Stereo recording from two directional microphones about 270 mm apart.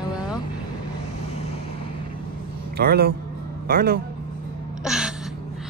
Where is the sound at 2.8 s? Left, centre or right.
Right.